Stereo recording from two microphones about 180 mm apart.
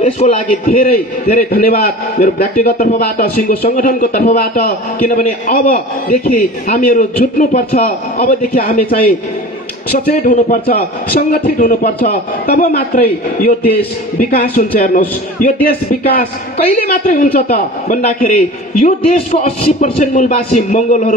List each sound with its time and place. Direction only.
0.0 s a man's voice: 50° left (ahead or behind)
9.9 s a man's voice: 45° left (ahead or behind)